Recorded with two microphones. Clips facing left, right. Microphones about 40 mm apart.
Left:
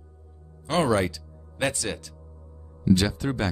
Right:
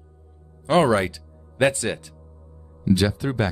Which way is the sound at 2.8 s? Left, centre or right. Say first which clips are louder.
Right 2 dB; centre.